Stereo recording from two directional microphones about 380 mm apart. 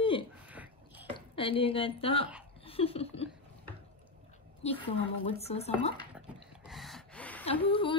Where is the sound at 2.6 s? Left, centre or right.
Centre.